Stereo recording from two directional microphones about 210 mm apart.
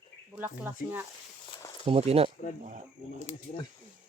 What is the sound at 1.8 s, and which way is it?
Speech, 30° right (ahead or behind).